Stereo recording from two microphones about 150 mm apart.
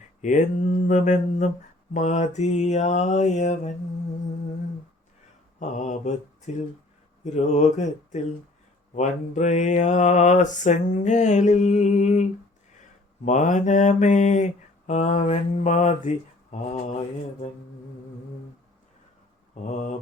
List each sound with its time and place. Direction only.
0.2 s mantra: 55° left (ahead or behind)
5.5 s mantra: 55° left (ahead or behind)